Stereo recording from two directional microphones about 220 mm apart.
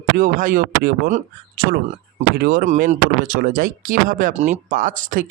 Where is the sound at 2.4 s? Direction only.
40° right (ahead or behind).